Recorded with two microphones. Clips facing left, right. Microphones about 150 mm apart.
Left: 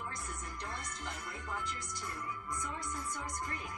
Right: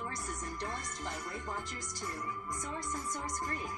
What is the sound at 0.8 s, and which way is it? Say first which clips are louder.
Music: right 3 dB; 45° right (ahead or behind).